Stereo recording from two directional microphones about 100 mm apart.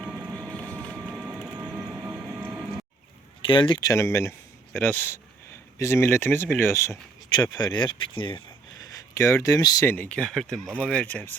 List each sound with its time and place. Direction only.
0.0 s boat: 10° right (ahead or behind)
0.5 s boat: 15° left (ahead or behind)
0.9 s crushing: 15° left (ahead or behind)
1.1 s crushing: 10° right (ahead or behind)
1.9 s train: 15° right (ahead or behind)
3.4 s speech: 55° left (ahead or behind)
3.8 s speech: 30° left (ahead or behind)
7.5 s speech: 45° left (ahead or behind)
8.8 s speech: 35° left (ahead or behind)
9.8 s speech: 20° left (ahead or behind)